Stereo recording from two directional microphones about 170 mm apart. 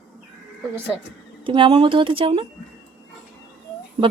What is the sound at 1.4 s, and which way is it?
Speech, 30° right (ahead or behind).